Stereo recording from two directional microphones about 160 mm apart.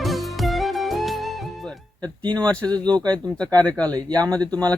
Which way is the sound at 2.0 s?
30° right (ahead or behind).